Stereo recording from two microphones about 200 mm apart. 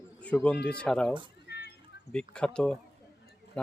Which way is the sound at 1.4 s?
55° left (ahead or behind).